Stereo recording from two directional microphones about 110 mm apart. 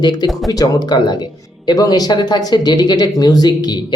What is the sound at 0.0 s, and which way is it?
Speech, 35° left (ahead or behind).